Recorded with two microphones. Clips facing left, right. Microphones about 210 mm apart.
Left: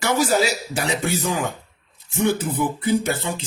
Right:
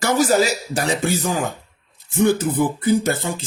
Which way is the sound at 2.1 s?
40° right (ahead or behind).